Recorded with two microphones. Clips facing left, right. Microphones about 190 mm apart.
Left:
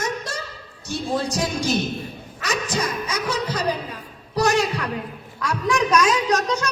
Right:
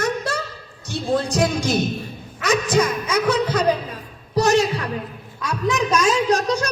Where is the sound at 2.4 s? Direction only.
50° right (ahead or behind).